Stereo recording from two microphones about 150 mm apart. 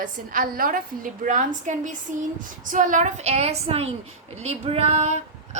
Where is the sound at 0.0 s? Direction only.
65° right (ahead or behind).